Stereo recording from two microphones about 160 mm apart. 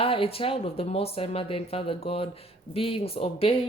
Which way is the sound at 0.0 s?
35° left (ahead or behind).